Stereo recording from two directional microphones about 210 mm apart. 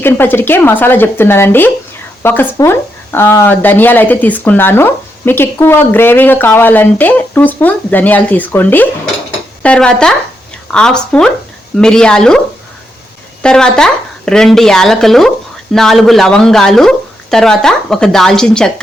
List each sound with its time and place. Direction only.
0.0 s speech: 10° left (ahead or behind)
13.4 s speech: 5° left (ahead or behind)